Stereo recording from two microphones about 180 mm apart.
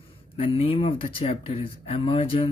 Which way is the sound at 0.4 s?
30° left (ahead or behind).